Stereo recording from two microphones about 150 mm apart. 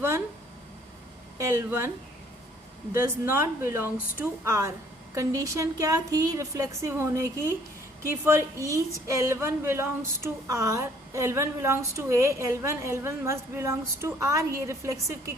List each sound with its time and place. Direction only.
1.4 s a woman's voice: 20° right (ahead or behind)
2.9 s a woman's voice: 15° right (ahead or behind)